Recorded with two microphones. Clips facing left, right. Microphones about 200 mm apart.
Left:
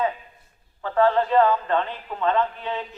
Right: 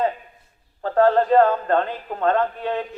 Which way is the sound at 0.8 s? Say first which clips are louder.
Right 3 dB; 45° right (ahead or behind).